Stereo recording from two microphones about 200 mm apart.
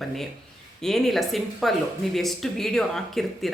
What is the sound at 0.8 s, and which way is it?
Speech, centre (ahead or behind).